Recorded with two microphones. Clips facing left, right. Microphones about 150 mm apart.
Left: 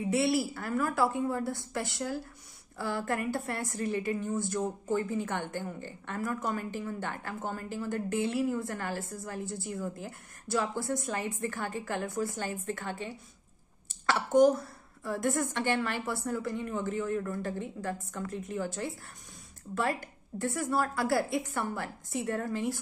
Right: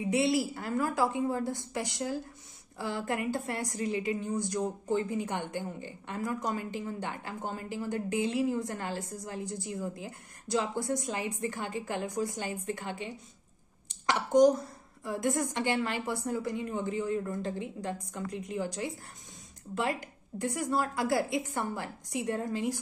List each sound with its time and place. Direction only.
0.0 s a woman's voice: 20° right (ahead or behind)